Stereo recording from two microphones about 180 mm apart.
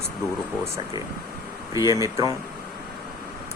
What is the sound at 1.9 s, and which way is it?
Speech, 15° right (ahead or behind).